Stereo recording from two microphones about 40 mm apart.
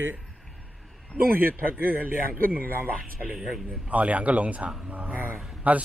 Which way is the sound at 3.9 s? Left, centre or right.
Right.